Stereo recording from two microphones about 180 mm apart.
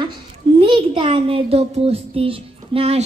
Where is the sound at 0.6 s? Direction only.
30° right (ahead or behind).